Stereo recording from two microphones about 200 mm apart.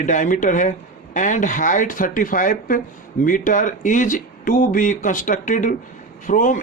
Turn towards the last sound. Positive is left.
turn(degrees=40)  # may be behind; listen again after turning